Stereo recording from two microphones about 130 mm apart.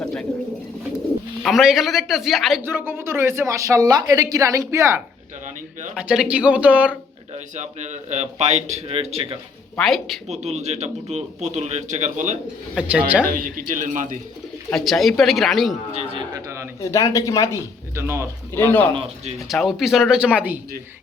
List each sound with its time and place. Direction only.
1.5 s a man's voice: centre (ahead or behind)
2.6 s speech: 15° right (ahead or behind)
5.9 s speech: 5° right (ahead or behind)
7.3 s speech: 65° right (ahead or behind)
9.7 s a man's voice: centre (ahead or behind)
10.2 s speech: 60° right (ahead or behind); by 12.4 s 75° right (ahead or behind)
12.7 s speech: 10° right (ahead or behind)
13.2 s speech: 90° right
14.7 s a man's voice: centre (ahead or behind)
16.8 s speech: 25° left (ahead or behind)
17.9 s speech: 20° right (ahead or behind)
18.5 s a man's voice: 15° left (ahead or behind)
19.5 s a man's voice: centre (ahead or behind)